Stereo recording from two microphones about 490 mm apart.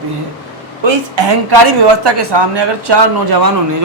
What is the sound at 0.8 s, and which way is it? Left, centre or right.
A woman's voice, right.